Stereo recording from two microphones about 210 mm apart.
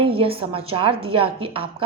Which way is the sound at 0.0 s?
25° right (ahead or behind).